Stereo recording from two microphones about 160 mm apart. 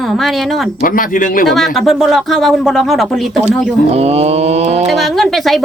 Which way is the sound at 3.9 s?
40° right (ahead or behind).